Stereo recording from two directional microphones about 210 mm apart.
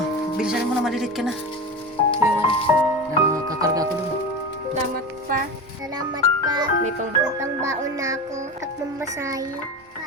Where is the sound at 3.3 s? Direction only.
15° right (ahead or behind).